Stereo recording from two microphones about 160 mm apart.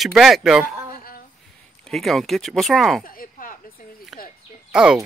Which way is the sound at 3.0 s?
60° left (ahead or behind).